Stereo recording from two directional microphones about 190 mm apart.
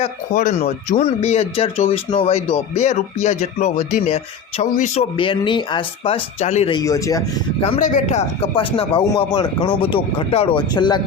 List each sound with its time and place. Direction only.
0.0 s speech: 40° left (ahead or behind)
6.7 s speech: 15° left (ahead or behind)
7.6 s speech: 40° left (ahead or behind)